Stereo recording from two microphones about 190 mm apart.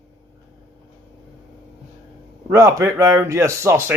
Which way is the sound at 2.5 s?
15° right (ahead or behind).